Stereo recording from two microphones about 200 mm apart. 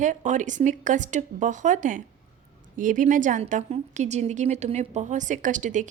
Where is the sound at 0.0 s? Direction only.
40° right (ahead or behind).